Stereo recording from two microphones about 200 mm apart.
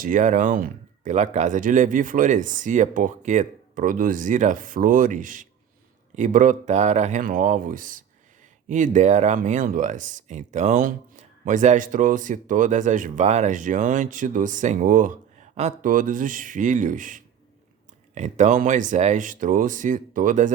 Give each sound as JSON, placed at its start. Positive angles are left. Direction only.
{"t": 0.0, "sound": "speech", "side_deg": -40}